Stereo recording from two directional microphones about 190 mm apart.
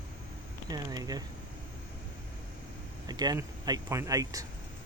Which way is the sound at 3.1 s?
20° right (ahead or behind).